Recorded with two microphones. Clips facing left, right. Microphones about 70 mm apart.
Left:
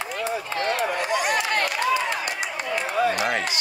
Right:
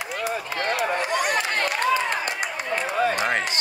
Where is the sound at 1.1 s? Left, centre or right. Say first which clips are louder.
Left 1 dB; right.